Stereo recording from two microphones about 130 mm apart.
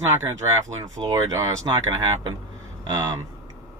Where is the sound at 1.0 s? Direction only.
30° right (ahead or behind).